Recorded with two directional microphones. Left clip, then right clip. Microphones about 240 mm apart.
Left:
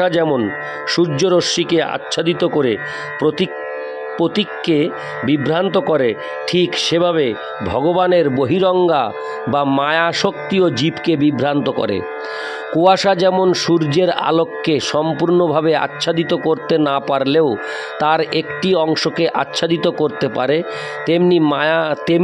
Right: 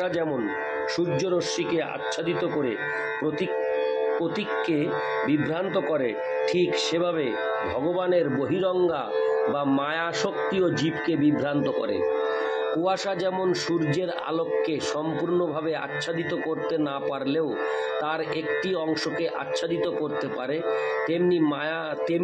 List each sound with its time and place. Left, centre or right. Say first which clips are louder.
0.0 s speech: left 11 dB; left
4.2 s speech: left 8 dB; left